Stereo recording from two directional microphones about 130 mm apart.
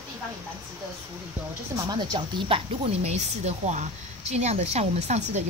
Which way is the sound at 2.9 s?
55° right (ahead or behind).